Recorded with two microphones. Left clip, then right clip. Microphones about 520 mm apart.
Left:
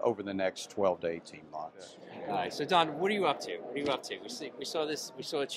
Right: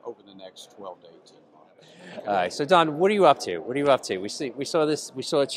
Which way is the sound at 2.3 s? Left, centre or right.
Right.